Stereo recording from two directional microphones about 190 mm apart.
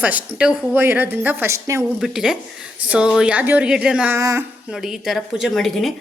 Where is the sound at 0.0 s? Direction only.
5° right (ahead or behind).